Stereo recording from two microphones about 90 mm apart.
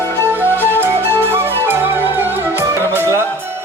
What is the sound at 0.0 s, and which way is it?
Music, 25° left (ahead or behind).